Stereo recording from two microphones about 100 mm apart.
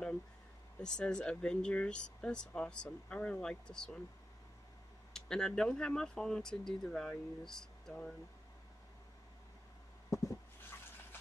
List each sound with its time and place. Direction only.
0.7 s speech: 10° left (ahead or behind)
5.1 s speech: 5° left (ahead or behind)
10.0 s a sound: 35° left (ahead or behind)